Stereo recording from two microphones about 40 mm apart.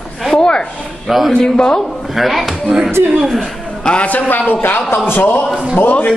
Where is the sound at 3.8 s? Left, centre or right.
Left.